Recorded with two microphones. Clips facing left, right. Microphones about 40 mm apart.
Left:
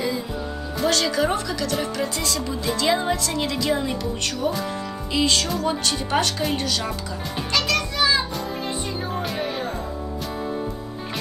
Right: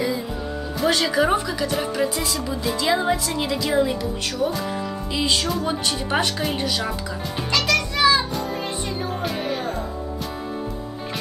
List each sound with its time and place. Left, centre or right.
0.8 s speech: centre
7.5 s music: right
9.2 s music: centre